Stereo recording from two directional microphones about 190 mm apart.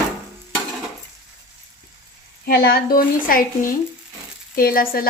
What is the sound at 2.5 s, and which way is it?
A woman's voice, 50° left (ahead or behind).